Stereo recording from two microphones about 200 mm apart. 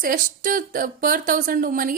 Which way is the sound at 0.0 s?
45° right (ahead or behind).